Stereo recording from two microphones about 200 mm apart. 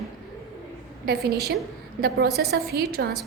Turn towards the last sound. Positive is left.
turn(degrees=-50)  # may be behind; listen again after turning